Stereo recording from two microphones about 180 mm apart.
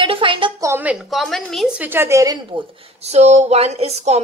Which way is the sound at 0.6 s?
10° right (ahead or behind).